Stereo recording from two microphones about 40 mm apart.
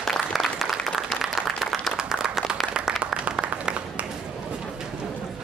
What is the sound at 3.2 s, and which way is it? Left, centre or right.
Applause, right.